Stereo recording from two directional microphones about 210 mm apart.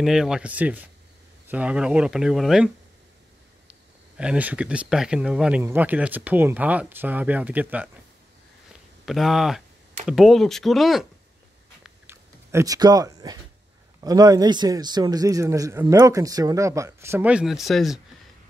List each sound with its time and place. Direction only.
0.0 s speech: 5° right (ahead or behind)
4.2 s speech: 5° right (ahead or behind)
9.0 s speech: centre (ahead or behind)
11.8 s a sound: 10° right (ahead or behind)
14.0 s speech: 15° right (ahead or behind); by 18.0 s centre (ahead or behind)